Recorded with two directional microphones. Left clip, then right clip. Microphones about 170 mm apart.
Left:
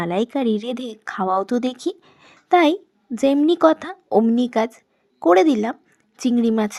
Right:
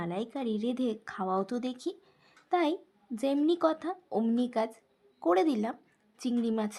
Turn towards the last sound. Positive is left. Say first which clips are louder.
# left 12 dB
turn(degrees=40)  # may be behind; listen again after turning